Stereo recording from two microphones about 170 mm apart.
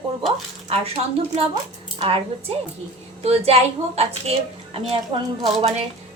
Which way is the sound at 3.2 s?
35° right (ahead or behind).